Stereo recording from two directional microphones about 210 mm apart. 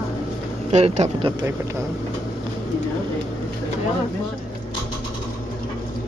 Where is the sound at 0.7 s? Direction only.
30° right (ahead or behind).